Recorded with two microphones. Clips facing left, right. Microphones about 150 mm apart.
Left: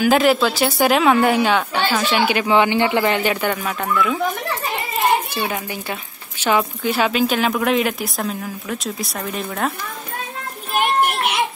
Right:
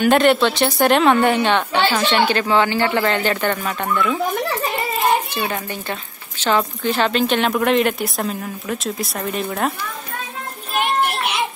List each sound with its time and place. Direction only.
0.0 s a woman's voice: centre (ahead or behind)
5.5 s a woman's voice: 5° left (ahead or behind)
10.8 s children playing: 45° left (ahead or behind)